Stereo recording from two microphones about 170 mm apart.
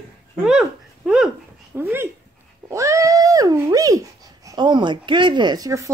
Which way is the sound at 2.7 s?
20° right (ahead or behind).